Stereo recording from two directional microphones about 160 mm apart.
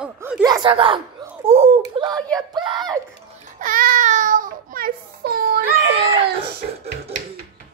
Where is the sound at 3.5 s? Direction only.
60° right (ahead or behind).